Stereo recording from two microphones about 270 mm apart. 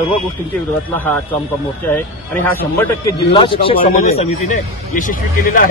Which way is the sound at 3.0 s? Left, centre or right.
Centre.